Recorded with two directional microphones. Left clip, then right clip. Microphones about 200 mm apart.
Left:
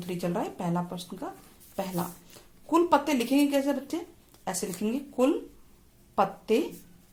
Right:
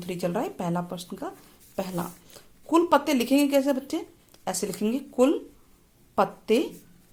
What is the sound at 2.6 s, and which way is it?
A woman's voice, 30° right (ahead or behind).